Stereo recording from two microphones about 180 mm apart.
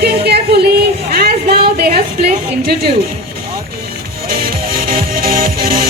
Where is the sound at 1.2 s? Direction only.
55° right (ahead or behind).